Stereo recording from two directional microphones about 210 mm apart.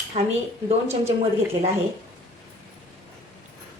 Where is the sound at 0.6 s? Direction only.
30° right (ahead or behind).